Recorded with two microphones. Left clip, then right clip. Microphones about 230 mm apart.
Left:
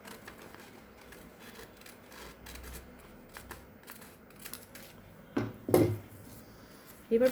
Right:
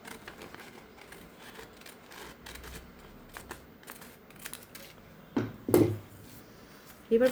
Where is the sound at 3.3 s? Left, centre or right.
Centre.